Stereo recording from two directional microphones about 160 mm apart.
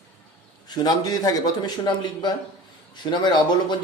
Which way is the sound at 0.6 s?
25° left (ahead or behind).